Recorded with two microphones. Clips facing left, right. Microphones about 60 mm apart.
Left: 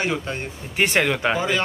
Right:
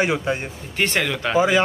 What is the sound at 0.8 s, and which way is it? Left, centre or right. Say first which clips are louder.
Speech: left 2 dB; centre.